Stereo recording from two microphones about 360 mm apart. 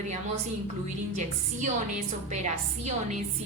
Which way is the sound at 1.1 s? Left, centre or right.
Centre.